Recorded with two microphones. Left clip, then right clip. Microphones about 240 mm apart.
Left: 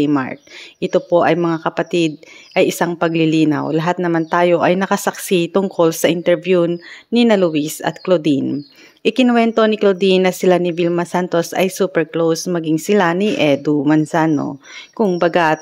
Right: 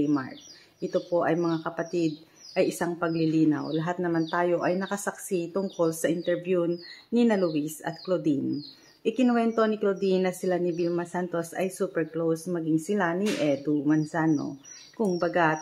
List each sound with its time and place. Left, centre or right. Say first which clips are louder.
0.0 s speech: left 10 dB; left